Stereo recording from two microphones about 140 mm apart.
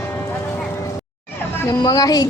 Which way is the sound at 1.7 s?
25° left (ahead or behind).